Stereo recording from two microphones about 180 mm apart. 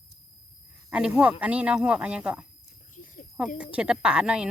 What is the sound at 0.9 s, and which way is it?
Speech, 5° right (ahead or behind).